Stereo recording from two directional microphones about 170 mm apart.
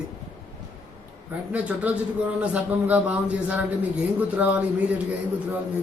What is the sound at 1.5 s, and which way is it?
A man's voice, 10° right (ahead or behind).